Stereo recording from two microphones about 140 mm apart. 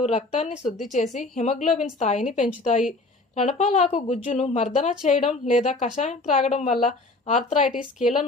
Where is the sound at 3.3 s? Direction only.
55° left (ahead or behind).